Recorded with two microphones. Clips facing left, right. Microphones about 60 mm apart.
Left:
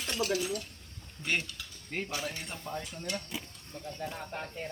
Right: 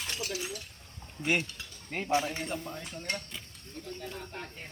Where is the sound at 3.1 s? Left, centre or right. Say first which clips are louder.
Right 1 dB; right.